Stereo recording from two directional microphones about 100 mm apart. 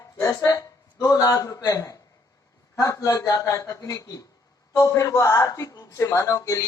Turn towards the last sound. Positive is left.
turn(degrees=35)  # may be behind; listen again after turning